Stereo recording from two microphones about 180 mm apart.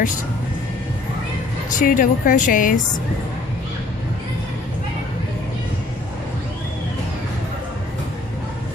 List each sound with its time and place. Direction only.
1.7 s a woman's voice: 50° left (ahead or behind)